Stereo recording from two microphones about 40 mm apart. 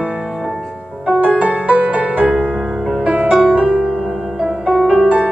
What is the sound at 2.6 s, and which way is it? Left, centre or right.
Music, centre.